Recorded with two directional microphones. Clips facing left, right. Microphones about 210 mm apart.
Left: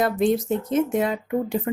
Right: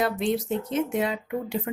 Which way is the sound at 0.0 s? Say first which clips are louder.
Left 4 dB; 45° left (ahead or behind).